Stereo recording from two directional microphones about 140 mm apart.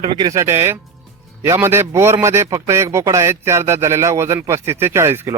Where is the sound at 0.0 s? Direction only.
35° right (ahead or behind).